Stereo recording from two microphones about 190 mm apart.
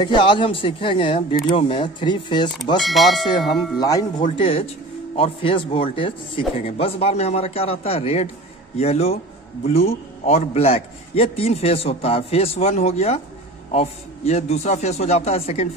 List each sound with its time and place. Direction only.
0.0 s speech: 25° left (ahead or behind)
2.8 s speech: centre (ahead or behind)
3.8 s speech: 20° left (ahead or behind)